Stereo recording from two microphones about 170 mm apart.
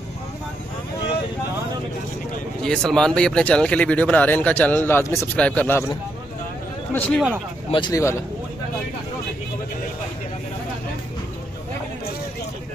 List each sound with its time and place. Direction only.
2.6 s speech: 5° left (ahead or behind)
6.9 s speech: 10° left (ahead or behind)
7.7 s speech: 25° left (ahead or behind)